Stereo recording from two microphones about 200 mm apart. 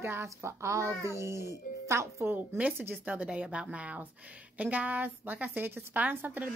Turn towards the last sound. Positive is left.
turn(degrees=-10)  # may be behind; listen again after turning